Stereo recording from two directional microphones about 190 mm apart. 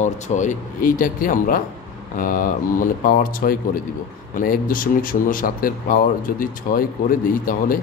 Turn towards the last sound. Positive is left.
turn(degrees=45)  # may be behind; listen again after turning